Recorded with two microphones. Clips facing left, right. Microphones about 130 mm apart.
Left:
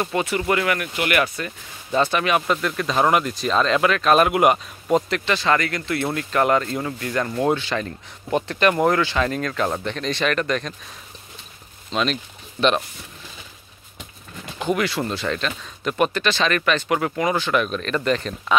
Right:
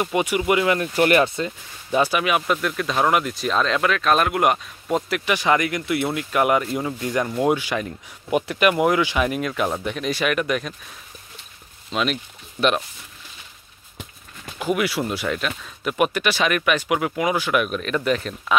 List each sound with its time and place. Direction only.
0.0 s speech: 15° right (ahead or behind)
0.9 s speech: 35° right (ahead or behind); by 5.2 s centre (ahead or behind)
5.2 s speech: 15° right (ahead or behind)
11.9 s speech: 5° right (ahead or behind)
14.6 s speech: 10° right (ahead or behind)